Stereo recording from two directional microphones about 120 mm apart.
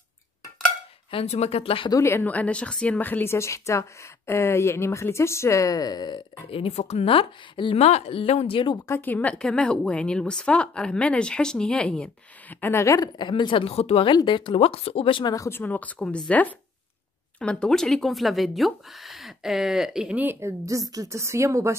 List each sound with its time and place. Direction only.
1.1 s speech: 60° left (ahead or behind)
1.9 s a woman's voice: 25° left (ahead or behind); by 7.8 s 45° left (ahead or behind)
7.8 s speech: 60° left (ahead or behind)
8.8 s speech: 20° left (ahead or behind)
13.2 s speech: 40° left (ahead or behind)
14.1 s speech: 40° left (ahead or behind)
15.3 s a woman's voice: 25° left (ahead or behind)
15.6 s a woman's voice: 15° left (ahead or behind); by 21.7 s 25° right (ahead or behind)